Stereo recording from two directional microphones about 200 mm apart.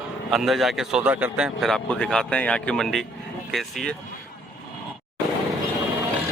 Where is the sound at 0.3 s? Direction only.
Centre (ahead or behind).